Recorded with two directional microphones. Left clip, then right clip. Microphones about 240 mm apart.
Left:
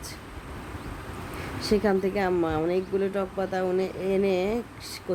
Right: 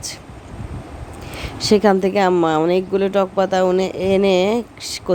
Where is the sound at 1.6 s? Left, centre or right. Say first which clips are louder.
Right 10 dB; right.